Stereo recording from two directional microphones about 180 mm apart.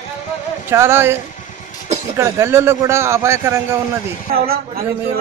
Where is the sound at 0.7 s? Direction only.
15° right (ahead or behind).